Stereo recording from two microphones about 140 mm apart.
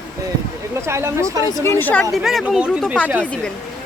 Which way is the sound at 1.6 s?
15° left (ahead or behind).